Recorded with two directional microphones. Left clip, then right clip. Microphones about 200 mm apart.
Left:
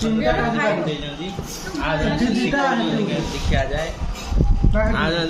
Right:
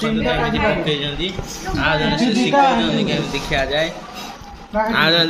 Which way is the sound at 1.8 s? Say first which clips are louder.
Right 4 dB; 20° right (ahead or behind).